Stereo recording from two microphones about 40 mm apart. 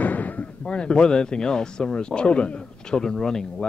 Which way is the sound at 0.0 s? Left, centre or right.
Left.